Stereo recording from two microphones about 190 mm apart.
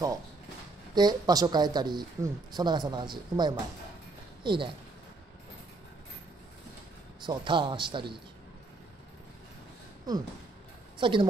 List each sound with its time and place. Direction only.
0.9 s speech: 20° right (ahead or behind)
7.2 s speech: 25° right (ahead or behind)
11.0 s a woman's voice: 25° right (ahead or behind)